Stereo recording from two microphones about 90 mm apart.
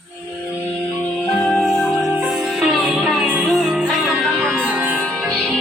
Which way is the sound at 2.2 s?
5° right (ahead or behind).